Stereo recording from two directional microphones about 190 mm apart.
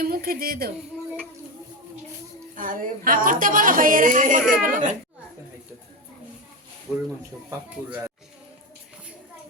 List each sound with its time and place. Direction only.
0.0 s speech: 50° right (ahead or behind)
2.6 s speech: 45° right (ahead or behind)
7.9 s speech: 10° right (ahead or behind)